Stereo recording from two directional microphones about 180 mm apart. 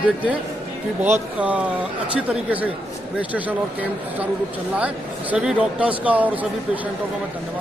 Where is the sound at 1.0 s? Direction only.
10° right (ahead or behind).